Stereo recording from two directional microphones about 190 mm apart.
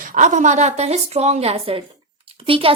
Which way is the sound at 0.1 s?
40° right (ahead or behind).